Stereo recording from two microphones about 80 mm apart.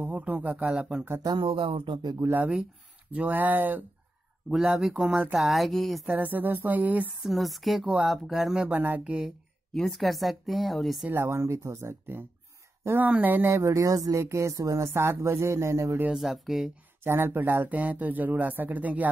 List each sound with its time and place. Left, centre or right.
0.0 s speech: right
1.2 s speech: right
2.2 s speech: right
4.5 s speech: centre
6.0 s speech: right
7.2 s speech: centre
8.6 s speech: right
9.0 s speech: centre
9.8 s speech: centre
11.1 s speech: right
13.5 s speech: right
16.1 s speech: centre
17.0 s speech: right